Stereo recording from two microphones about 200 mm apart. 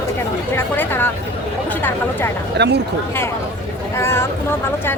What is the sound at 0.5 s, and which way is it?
Chatter, 10° left (ahead or behind).